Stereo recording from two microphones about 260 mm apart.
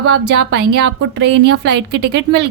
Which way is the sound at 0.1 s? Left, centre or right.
Right.